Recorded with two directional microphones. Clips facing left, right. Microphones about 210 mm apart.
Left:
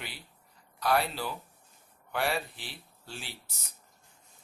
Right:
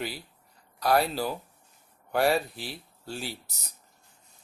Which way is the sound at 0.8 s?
40° right (ahead or behind).